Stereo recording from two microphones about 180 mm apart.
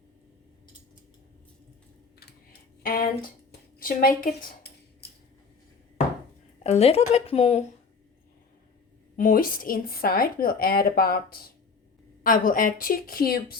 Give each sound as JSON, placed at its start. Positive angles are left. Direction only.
{"t": 2.1, "sound": "typing", "side_deg": 60}
{"t": 3.8, "sound": "a woman's voice", "side_deg": 50}
{"t": 6.6, "sound": "a woman's voice", "side_deg": 35}
{"t": 9.1, "sound": "a woman's voice", "side_deg": 50}